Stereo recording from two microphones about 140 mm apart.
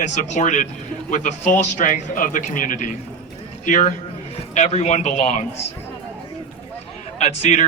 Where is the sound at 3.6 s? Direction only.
60° left (ahead or behind).